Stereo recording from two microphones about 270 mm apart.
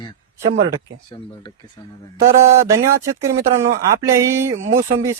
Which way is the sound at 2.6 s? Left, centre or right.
Centre.